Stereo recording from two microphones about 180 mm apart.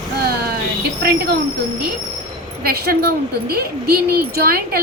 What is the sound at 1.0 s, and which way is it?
Speech, 65° right (ahead or behind).